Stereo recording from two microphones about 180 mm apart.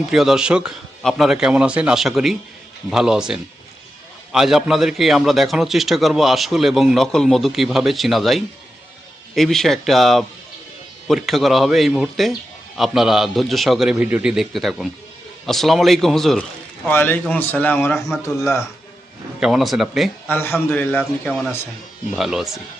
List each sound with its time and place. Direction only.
0.1 s a man's voice: centre (ahead or behind); by 18.6 s 15° left (ahead or behind)
19.4 s a man's voice: centre (ahead or behind)
20.2 s a man's voice: 10° left (ahead or behind)